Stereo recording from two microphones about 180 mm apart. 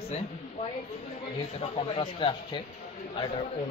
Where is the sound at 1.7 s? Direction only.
30° left (ahead or behind).